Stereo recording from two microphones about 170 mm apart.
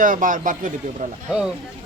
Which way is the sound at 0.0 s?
50° right (ahead or behind).